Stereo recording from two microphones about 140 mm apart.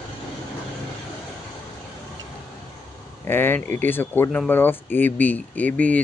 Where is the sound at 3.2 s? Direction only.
15° left (ahead or behind).